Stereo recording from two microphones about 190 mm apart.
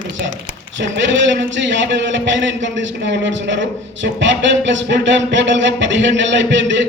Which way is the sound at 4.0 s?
70° right (ahead or behind).